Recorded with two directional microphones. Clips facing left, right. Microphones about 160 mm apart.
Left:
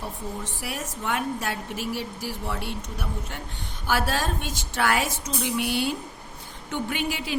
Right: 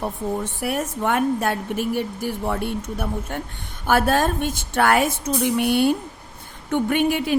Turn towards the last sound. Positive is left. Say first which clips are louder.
# right 9 dB
turn(degrees=-50)  # may be behind; listen again after turning